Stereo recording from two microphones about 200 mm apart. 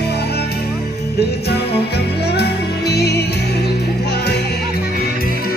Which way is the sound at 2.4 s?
55° left (ahead or behind).